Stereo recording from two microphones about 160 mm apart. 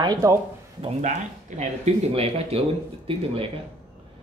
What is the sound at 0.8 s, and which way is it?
Speech, 45° right (ahead or behind).